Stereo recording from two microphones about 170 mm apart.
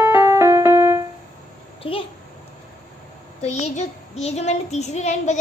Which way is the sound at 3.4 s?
40° left (ahead or behind).